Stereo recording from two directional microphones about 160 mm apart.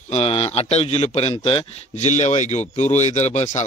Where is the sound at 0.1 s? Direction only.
40° left (ahead or behind).